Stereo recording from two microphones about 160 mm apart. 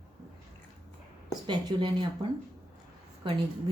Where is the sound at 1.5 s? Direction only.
30° right (ahead or behind).